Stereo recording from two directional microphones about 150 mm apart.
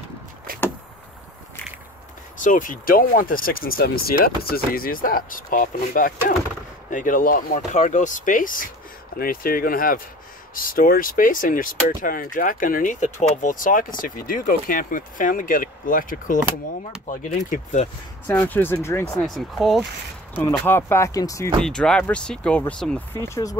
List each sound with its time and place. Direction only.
2.3 s speech: 60° left (ahead or behind)
18.2 s speech: 15° left (ahead or behind)
19.2 s speech: centre (ahead or behind)
20.4 s speech: 15° left (ahead or behind)
21.5 s speech: 5° left (ahead or behind)
23.2 s speech: 20° left (ahead or behind)